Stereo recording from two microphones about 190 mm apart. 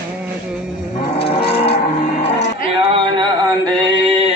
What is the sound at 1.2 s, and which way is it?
Livestock, 30° left (ahead or behind).